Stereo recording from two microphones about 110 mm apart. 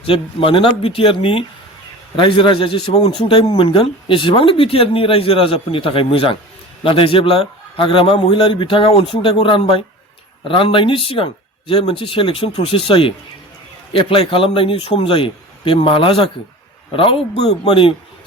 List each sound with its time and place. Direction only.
0.0 s a man's voice: 55° left (ahead or behind)